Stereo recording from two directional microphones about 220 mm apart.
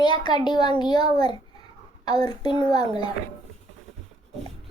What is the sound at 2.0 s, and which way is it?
A child's voice, 20° left (ahead or behind).